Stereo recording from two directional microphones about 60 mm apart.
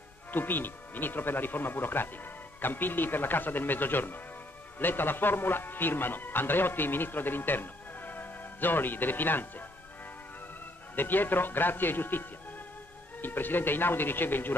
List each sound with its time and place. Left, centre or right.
0.3 s speech: left
11.0 s speech: left